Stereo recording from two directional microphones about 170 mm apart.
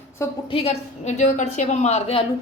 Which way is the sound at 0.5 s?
35° left (ahead or behind).